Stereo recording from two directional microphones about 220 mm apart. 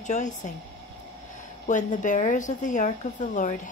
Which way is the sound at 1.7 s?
35° left (ahead or behind).